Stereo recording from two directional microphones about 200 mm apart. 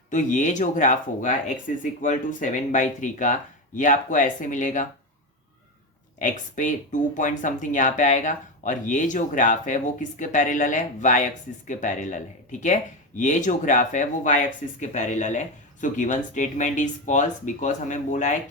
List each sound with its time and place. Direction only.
0.1 s speech: 40° left (ahead or behind)
6.1 s speech: 40° left (ahead or behind)